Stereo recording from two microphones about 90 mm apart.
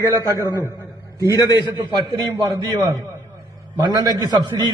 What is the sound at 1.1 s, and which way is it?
Speech, 40° left (ahead or behind).